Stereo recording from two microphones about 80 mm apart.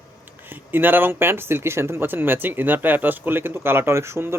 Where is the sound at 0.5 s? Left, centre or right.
Right.